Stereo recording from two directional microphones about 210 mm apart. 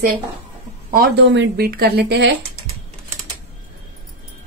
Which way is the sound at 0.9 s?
50° right (ahead or behind).